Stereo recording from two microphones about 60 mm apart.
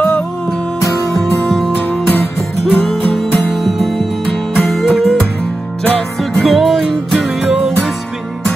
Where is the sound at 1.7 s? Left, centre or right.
Left.